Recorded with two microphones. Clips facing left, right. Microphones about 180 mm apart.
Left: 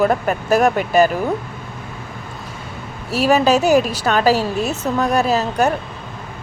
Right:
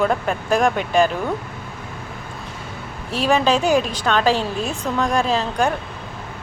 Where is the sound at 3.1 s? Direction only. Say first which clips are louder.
Left 3 dB; 5° left (ahead or behind).